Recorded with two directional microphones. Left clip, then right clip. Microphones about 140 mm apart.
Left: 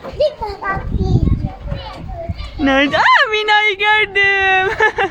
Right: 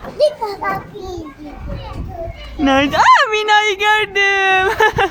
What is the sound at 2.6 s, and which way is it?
Speech, 10° right (ahead or behind).